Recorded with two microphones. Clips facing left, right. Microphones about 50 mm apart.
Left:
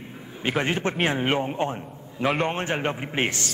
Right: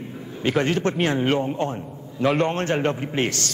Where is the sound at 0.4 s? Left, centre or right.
Centre.